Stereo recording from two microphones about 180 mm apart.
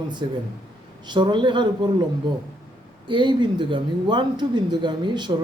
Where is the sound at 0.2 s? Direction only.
25° right (ahead or behind).